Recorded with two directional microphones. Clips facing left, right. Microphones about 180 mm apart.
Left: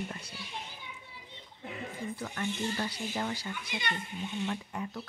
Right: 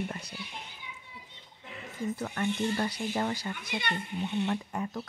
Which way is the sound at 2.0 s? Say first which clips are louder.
Right 6 dB; 50° right (ahead or behind).